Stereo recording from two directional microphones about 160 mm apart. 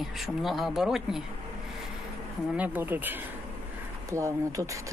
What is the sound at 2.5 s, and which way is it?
Speech, 10° right (ahead or behind).